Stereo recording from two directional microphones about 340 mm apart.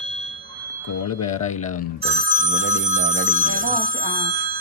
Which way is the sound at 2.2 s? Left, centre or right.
Right.